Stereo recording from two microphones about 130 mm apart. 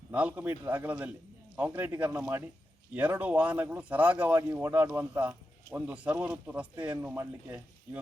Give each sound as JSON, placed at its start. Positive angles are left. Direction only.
{"t": 0.1, "sound": "a man's voice", "side_deg": -10}